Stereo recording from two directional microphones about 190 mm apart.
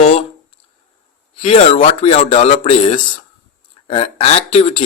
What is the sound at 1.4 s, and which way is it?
Speech, 30° left (ahead or behind).